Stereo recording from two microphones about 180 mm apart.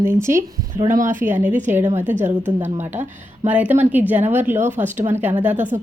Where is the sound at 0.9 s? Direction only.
45° right (ahead or behind).